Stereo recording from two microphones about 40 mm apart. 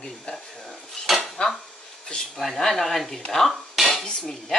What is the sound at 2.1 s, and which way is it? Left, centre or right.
Speech, centre.